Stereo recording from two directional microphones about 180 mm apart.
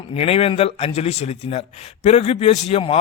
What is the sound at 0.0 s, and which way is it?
Speech, 30° left (ahead or behind).